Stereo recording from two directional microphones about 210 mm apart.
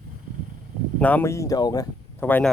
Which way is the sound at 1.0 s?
10° left (ahead or behind).